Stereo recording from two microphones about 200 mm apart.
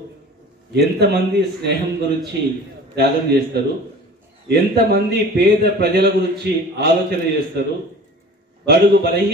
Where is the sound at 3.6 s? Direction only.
55° right (ahead or behind).